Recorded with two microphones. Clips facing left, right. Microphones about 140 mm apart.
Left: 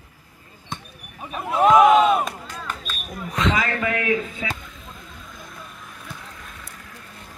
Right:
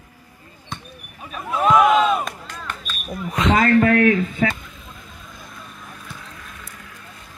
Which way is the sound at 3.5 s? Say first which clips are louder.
Right 9 dB; 55° right (ahead or behind).